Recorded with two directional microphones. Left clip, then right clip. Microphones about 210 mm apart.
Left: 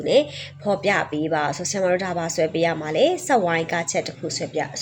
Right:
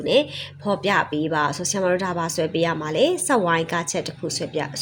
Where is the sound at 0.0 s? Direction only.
15° right (ahead or behind).